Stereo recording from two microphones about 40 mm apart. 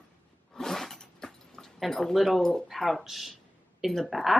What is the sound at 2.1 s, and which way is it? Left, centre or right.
Speech, centre.